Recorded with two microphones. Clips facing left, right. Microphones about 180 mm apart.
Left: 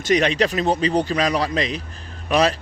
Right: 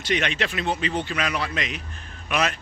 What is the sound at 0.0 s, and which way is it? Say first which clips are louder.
A man's voice: left 7 dB; 40° left (ahead or behind).